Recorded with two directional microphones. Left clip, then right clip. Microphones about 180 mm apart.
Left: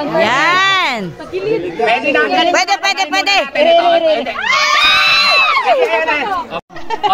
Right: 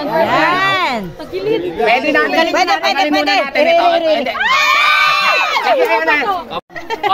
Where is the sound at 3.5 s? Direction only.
35° right (ahead or behind).